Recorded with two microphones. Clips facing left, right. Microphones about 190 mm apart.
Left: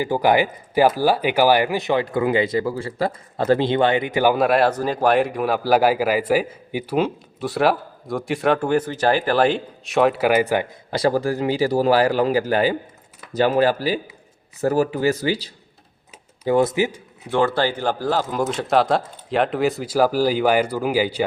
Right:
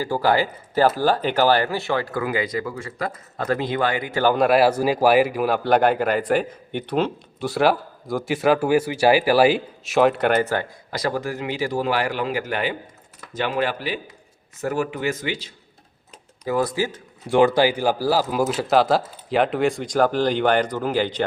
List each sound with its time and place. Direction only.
0.0 s speech: 15° left (ahead or behind)
4.4 s speech: centre (ahead or behind)
10.9 s speech: 30° left (ahead or behind)
16.5 s speech: 25° left (ahead or behind)
17.2 s speech: 15° right (ahead or behind); by 21.2 s 10° left (ahead or behind)